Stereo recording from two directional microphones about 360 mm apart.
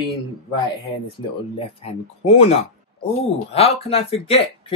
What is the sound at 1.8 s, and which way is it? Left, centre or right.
Speech, centre.